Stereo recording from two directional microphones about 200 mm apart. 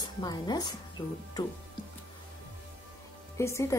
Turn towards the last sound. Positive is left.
turn(degrees=15)  # may be behind; listen again after turning